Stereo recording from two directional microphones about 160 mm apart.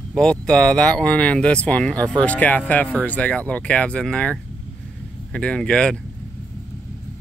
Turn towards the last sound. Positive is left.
turn(degrees=5)  # may be behind; listen again after turning